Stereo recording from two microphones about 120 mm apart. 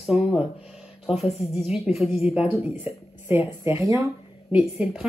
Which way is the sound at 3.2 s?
20° right (ahead or behind).